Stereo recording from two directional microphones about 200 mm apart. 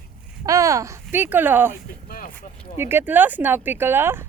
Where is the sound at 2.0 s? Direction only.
45° left (ahead or behind).